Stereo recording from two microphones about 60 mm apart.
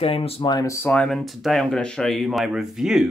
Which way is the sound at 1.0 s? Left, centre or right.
Centre.